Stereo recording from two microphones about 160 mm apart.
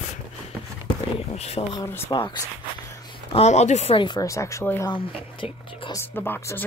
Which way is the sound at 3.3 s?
45° left (ahead or behind).